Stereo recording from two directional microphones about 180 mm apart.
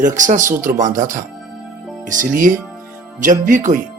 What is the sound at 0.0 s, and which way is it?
Speech, 45° right (ahead or behind).